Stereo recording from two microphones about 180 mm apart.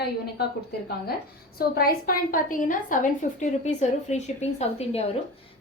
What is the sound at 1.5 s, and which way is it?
A woman's voice, 55° left (ahead or behind).